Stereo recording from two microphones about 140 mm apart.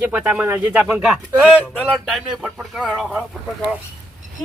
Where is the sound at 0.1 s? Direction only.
10° right (ahead or behind).